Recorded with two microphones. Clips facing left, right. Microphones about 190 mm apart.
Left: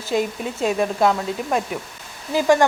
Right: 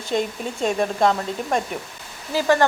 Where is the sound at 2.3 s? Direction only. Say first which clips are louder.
Left 2 dB; 15° left (ahead or behind).